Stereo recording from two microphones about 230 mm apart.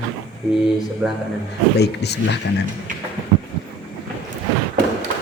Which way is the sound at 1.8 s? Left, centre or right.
Left.